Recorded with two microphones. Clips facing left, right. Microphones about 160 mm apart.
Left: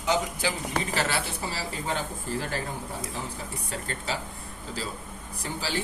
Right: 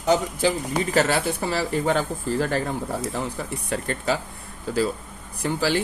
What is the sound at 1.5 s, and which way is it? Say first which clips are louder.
Speech: right 11 dB; 75° right (ahead or behind).